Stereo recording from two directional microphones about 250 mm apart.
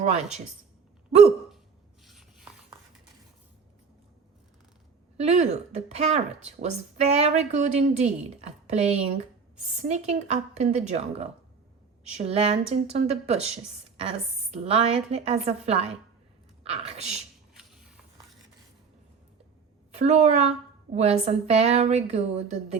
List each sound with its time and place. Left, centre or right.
0.0 s speech: right
2.0 s rub: centre
5.1 s speech: right
17.5 s a sound: centre
20.0 s speech: right